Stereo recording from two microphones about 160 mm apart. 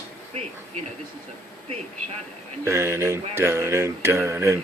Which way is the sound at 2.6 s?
15° right (ahead or behind).